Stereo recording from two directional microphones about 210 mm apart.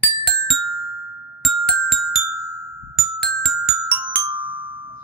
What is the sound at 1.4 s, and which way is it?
Glockenspiel, centre (ahead or behind).